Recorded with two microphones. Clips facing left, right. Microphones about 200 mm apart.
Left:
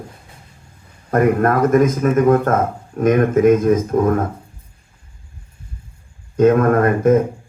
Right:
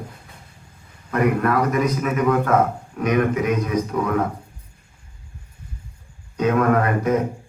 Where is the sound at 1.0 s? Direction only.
45° left (ahead or behind).